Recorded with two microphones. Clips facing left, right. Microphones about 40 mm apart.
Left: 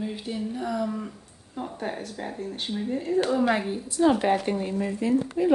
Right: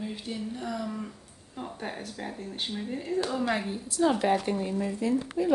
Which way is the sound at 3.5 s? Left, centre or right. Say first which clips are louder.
Left 5 dB; centre.